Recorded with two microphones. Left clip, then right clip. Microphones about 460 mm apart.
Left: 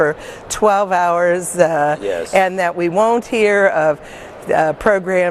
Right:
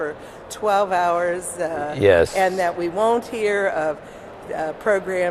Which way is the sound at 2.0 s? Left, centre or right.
Right.